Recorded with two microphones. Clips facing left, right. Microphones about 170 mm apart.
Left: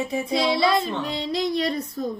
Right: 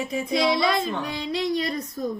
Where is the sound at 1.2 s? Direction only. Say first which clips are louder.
Left 1 dB; 35° left (ahead or behind).